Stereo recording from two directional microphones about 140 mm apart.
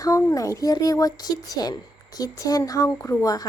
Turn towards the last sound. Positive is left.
turn(degrees=25)  # may be behind; listen again after turning